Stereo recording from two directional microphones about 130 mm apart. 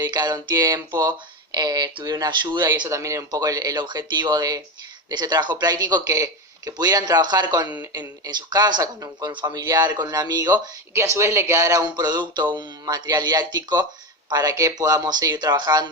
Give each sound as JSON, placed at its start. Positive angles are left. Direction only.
{"t": 0.0, "sound": "speech", "side_deg": -35}
{"t": 2.9, "sound": "speech", "side_deg": -25}